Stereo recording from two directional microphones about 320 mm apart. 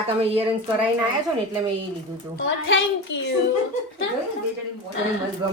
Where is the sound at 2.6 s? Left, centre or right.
Left.